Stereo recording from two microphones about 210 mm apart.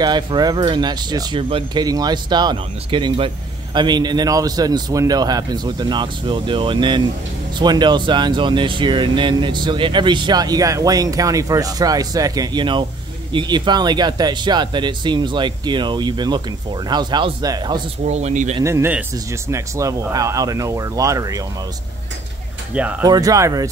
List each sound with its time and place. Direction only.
0.0 s speech: 20° right (ahead or behind)
18.0 s speech: 35° right (ahead or behind)
18.6 s speech: 10° right (ahead or behind)
22.8 s speech: 5° right (ahead or behind)
23.0 s speech: 15° right (ahead or behind)